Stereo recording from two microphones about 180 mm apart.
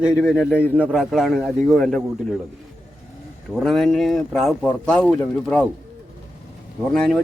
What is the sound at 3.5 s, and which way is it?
Speech, centre (ahead or behind).